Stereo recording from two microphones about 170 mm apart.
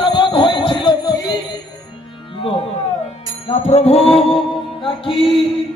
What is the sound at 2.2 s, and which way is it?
Music, 35° left (ahead or behind).